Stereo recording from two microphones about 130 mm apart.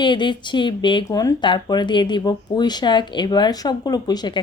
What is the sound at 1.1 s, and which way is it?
Speech, 25° left (ahead or behind).